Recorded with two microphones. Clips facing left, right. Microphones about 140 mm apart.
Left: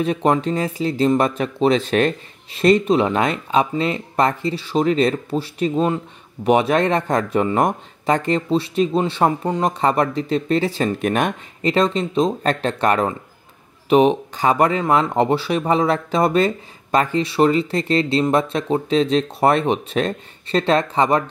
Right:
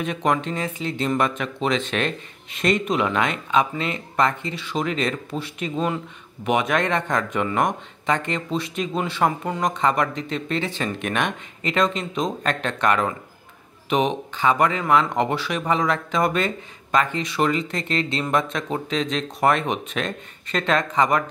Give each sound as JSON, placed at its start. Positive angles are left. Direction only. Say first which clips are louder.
{"t": 0.0, "sound": "speech", "louder": "left 5 dB", "side_deg": 35}